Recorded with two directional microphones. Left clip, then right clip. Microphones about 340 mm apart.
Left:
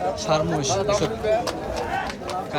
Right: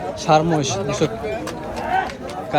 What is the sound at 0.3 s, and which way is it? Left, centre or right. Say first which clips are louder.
Speech: right 7 dB; centre.